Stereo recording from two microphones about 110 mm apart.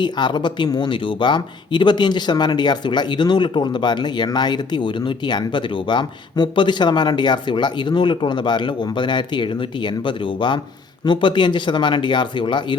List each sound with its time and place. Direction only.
0.0 s speech: 45° left (ahead or behind)